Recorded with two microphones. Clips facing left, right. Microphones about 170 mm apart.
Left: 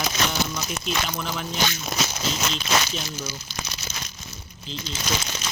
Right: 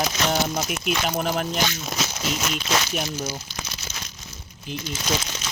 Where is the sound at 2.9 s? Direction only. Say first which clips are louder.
Right 5 dB; 55° right (ahead or behind).